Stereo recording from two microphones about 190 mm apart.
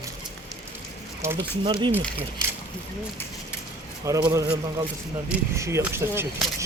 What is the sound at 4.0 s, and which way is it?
Speech, 15° right (ahead or behind).